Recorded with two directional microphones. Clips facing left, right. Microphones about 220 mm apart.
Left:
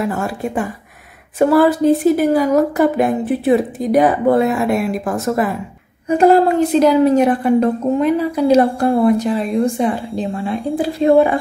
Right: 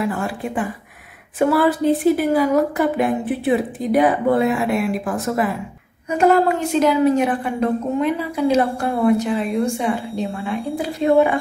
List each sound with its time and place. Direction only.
0.0 s a woman's voice: 45° left (ahead or behind)
1.5 s a woman's voice: 40° left (ahead or behind)
6.0 s a woman's voice: 35° left (ahead or behind)